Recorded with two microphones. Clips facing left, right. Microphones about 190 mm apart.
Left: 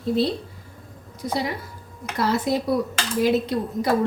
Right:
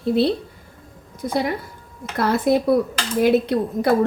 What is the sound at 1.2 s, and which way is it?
A woman's voice, 55° right (ahead or behind).